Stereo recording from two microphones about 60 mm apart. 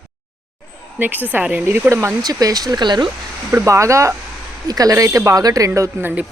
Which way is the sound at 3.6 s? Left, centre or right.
Right.